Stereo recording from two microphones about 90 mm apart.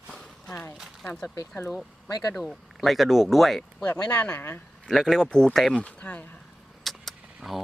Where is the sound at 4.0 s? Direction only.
15° left (ahead or behind).